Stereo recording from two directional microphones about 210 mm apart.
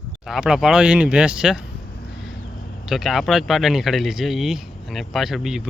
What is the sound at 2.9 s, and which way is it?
Speech, centre (ahead or behind).